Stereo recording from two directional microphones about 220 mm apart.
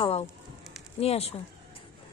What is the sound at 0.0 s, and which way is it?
Speech, 30° left (ahead or behind).